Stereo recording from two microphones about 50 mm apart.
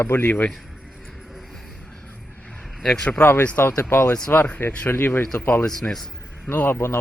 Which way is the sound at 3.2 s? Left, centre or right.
Left.